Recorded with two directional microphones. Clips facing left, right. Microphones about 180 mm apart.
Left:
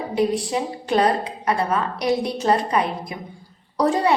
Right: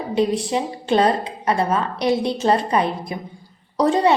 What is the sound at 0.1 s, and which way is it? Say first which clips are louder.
A woman's voice: right 2 dB; 25° right (ahead or behind).